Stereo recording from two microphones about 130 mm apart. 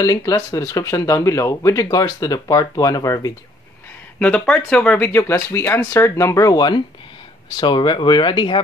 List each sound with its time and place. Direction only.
0.0 s speech: 25° left (ahead or behind)
4.2 s speech: 10° left (ahead or behind); by 8.5 s 35° left (ahead or behind)